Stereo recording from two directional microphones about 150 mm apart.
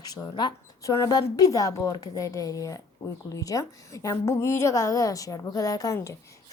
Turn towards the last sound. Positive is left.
turn(degrees=20)  # may be behind; listen again after turning